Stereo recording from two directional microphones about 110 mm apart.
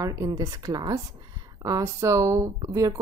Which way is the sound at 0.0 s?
30° right (ahead or behind).